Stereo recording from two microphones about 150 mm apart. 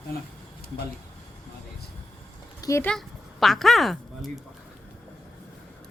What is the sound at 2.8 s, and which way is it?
A woman's voice, centre (ahead or behind).